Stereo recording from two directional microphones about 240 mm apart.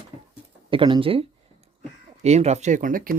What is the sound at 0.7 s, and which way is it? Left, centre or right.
Speech, right.